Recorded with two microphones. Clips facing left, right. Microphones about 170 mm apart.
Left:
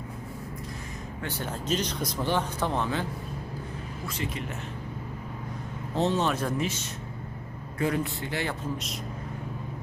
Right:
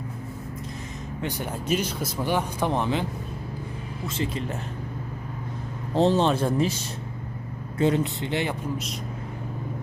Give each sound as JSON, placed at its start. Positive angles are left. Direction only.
{"t": 1.2, "sound": "speech", "side_deg": -15}
{"t": 4.0, "sound": "speech", "side_deg": -30}
{"t": 5.9, "sound": "speech", "side_deg": -30}